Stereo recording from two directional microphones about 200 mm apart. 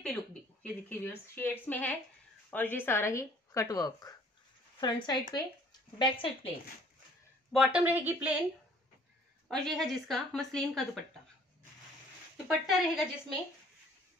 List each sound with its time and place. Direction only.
0.0 s speech: 5° left (ahead or behind); by 6.5 s 25° left (ahead or behind)
7.5 s a woman's voice: centre (ahead or behind)
9.5 s a woman's voice: 5° left (ahead or behind)
12.4 s a woman's voice: centre (ahead or behind)